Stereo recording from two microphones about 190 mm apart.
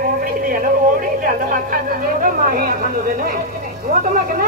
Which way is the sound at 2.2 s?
45° right (ahead or behind).